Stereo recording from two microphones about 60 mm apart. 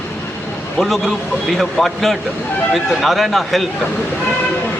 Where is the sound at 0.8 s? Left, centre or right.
Centre.